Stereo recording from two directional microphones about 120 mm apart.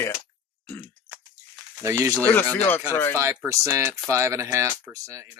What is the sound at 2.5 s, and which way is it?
Speech, 15° left (ahead or behind).